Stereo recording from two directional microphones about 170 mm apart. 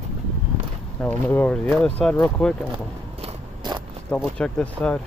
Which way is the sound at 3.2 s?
30° right (ahead or behind).